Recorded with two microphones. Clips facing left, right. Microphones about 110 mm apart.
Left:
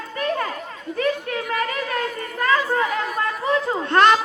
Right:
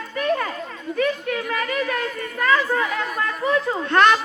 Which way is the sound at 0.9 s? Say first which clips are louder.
Right 1 dB; 35° left (ahead or behind).